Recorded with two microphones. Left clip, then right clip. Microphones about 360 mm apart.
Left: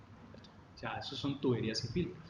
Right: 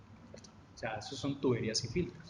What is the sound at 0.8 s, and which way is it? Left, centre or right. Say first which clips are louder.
A man's voice: right 1 dB; right.